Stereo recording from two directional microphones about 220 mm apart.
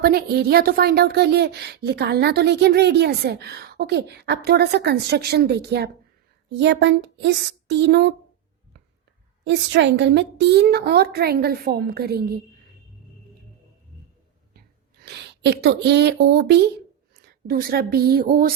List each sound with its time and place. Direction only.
0.0 s a woman's voice: 45° right (ahead or behind)
9.4 s a woman's voice: 55° right (ahead or behind)
15.0 s speech: 50° right (ahead or behind)